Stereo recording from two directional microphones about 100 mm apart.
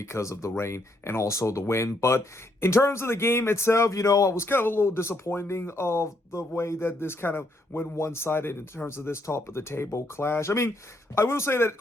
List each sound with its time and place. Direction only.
0.0 s speech: 30° left (ahead or behind)